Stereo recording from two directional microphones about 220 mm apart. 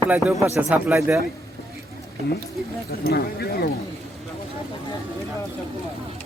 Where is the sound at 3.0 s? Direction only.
45° left (ahead or behind).